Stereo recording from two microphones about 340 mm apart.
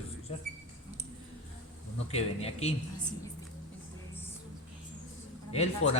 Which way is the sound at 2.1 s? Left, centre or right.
Centre.